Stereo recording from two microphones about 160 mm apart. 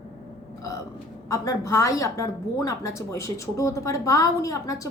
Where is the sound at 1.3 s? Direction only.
20° left (ahead or behind).